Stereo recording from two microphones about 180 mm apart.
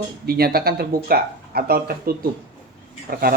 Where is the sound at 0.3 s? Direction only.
60° right (ahead or behind).